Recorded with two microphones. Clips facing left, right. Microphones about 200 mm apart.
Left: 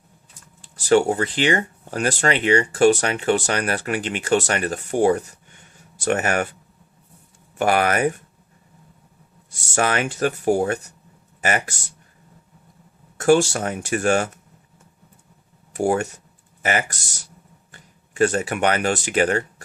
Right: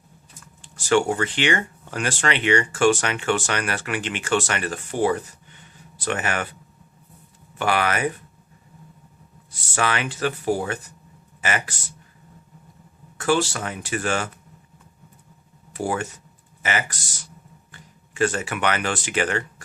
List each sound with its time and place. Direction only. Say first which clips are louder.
0.6 s speech: left 3 dB; 40° left (ahead or behind)
7.6 s speech: left 4 dB; 45° left (ahead or behind)
9.6 s speech: left 3 dB; 45° left (ahead or behind)
13.1 s speech: left 6 dB; 45° left (ahead or behind)
15.7 s speech: left 5 dB; 45° left (ahead or behind)